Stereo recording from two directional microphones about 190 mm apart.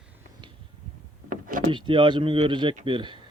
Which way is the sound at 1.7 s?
25° right (ahead or behind).